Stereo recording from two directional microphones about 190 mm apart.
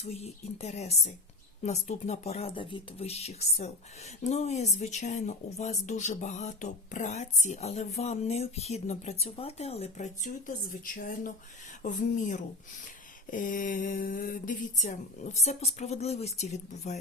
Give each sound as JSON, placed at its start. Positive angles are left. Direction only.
{"t": 0.0, "sound": "speech", "side_deg": 35}